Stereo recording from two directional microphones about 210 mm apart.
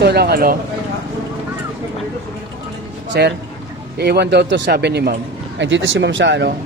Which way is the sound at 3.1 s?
50° right (ahead or behind).